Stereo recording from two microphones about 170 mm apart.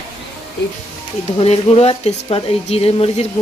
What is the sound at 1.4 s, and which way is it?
Speech, 35° left (ahead or behind).